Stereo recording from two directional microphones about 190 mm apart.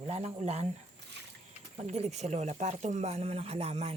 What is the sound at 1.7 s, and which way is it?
Speech, 35° right (ahead or behind).